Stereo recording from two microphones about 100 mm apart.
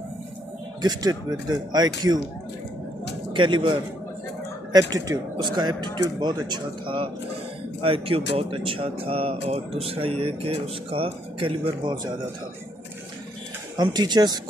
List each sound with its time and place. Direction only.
0.8 s speech: 40° right (ahead or behind)
3.3 s a man's voice: 55° right (ahead or behind)
4.7 s speech: 35° right (ahead or behind)
5.4 s speech: 45° right (ahead or behind)
7.8 s speech: 70° right (ahead or behind); by 12.0 s 55° right (ahead or behind)
13.7 s speech: 45° right (ahead or behind)